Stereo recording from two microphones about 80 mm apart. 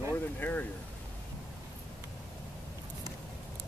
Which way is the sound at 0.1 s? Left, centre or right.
Left.